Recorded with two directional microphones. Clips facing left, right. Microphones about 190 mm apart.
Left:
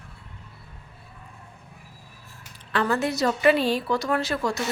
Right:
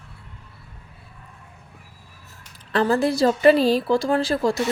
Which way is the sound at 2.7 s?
35° right (ahead or behind).